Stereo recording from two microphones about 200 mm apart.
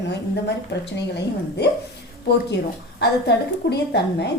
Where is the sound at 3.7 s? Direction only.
55° left (ahead or behind).